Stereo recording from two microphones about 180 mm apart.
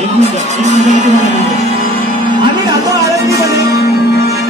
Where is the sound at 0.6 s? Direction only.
40° right (ahead or behind).